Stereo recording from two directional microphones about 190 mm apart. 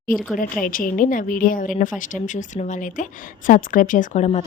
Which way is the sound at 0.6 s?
45° left (ahead or behind).